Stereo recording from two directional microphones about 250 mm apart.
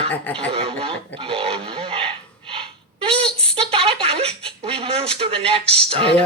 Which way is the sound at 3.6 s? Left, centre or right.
Right.